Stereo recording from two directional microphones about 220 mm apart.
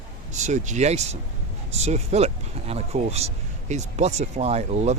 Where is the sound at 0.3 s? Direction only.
35° right (ahead or behind).